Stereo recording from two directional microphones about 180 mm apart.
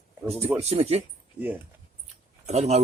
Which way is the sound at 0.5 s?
35° right (ahead or behind).